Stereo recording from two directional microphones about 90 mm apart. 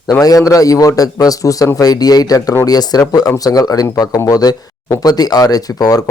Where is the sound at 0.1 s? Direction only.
45° left (ahead or behind).